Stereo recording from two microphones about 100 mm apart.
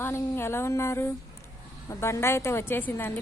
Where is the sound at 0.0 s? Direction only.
25° left (ahead or behind).